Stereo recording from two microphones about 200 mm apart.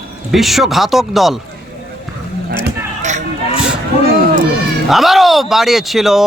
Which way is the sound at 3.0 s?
35° right (ahead or behind).